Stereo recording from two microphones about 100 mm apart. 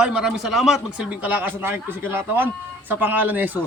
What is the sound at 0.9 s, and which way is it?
A man's voice, 15° right (ahead or behind).